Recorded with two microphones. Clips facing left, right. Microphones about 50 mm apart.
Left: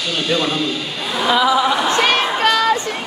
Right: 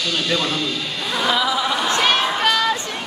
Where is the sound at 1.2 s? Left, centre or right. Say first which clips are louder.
Left 5 dB; centre.